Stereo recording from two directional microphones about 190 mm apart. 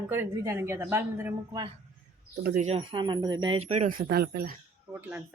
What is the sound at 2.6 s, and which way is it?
Speech, 35° right (ahead or behind).